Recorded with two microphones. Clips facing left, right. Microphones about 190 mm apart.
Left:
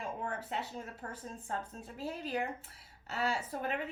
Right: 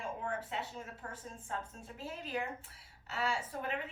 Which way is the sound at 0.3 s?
40° left (ahead or behind).